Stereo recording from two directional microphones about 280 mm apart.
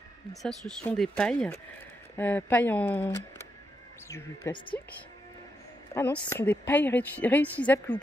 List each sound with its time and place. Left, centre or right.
0.3 s a woman's voice: centre
5.9 s a woman's voice: centre